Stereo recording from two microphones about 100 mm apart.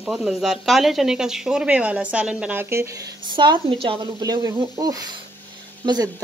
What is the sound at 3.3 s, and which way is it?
Speech, 50° right (ahead or behind).